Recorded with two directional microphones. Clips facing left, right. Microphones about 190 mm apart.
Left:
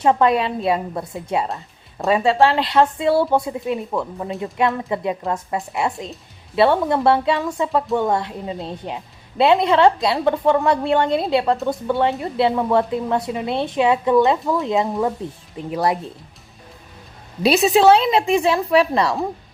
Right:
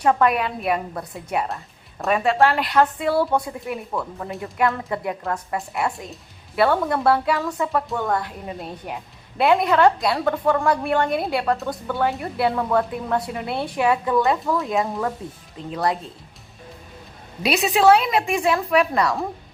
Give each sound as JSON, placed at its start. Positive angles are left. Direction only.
{"t": 0.0, "sound": "a woman's voice", "side_deg": 25}
{"t": 17.4, "sound": "a woman's voice", "side_deg": 25}